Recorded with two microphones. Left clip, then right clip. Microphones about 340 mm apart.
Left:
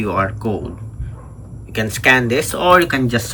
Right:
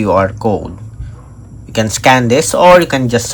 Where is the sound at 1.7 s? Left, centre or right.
Centre.